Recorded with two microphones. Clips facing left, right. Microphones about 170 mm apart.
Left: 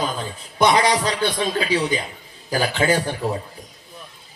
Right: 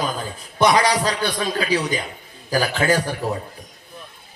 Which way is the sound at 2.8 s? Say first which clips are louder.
Even; 25° left (ahead or behind).